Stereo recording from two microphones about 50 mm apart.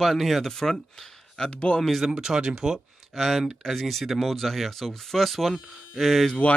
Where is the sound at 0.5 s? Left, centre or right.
Centre.